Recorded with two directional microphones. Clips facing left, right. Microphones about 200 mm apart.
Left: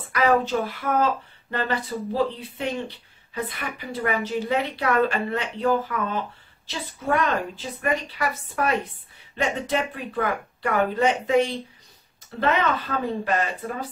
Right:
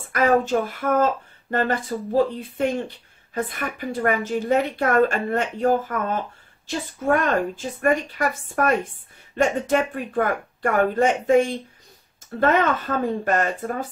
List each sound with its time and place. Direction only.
0.1 s a woman's voice: 45° right (ahead or behind)